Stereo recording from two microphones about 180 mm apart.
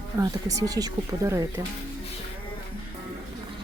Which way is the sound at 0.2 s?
20° right (ahead or behind).